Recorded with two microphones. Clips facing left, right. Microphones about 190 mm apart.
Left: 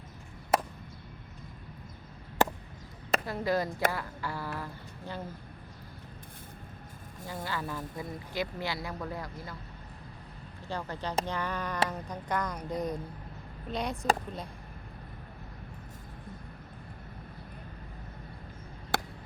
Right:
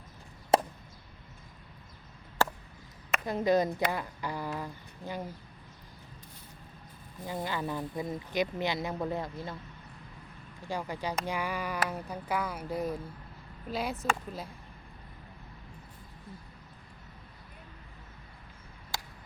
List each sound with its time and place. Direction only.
0.5 s chop: 25° right (ahead or behind)
2.4 s chop: 20° left (ahead or behind)
3.2 s speech: 20° right (ahead or behind)
7.3 s speech: 20° right (ahead or behind)
10.7 s speech: 10° right (ahead or behind)
18.9 s a sound: 60° left (ahead or behind)